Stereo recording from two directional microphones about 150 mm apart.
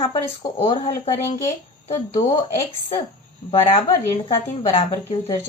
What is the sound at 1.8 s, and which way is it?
Speech, 40° left (ahead or behind).